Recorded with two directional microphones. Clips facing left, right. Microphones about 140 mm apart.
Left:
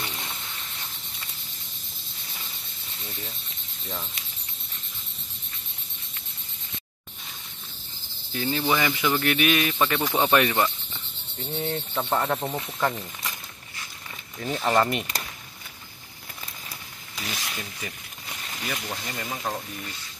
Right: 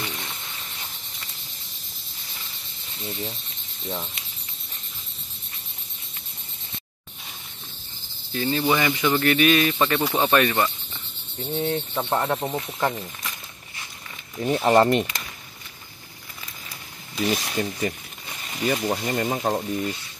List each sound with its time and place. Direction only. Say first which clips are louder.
3.1 s speech: right 8 dB; 25° right (ahead or behind)
8.3 s speech: right 3 dB; 5° left (ahead or behind)
8.5 s speech: right 3 dB; 15° right (ahead or behind)
9.0 s speech: right 4 dB; centre (ahead or behind)
9.8 s speech: right 2 dB; 5° right (ahead or behind)
10.3 s speech: right 1 dB; 10° left (ahead or behind)
11.4 s speech: right 4 dB; 10° right (ahead or behind)
14.4 s speech: right 6 dB; 15° right (ahead or behind)
14.8 s speech: right 5 dB; 35° right (ahead or behind)
17.3 s speech: right 9 dB; 35° right (ahead or behind)